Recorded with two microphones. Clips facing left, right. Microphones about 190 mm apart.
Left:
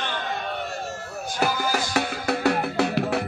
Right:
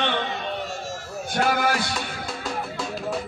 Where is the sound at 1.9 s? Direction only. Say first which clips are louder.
Left 6 dB; 70° left (ahead or behind).